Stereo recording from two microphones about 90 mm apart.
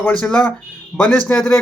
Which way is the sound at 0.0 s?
15° left (ahead or behind).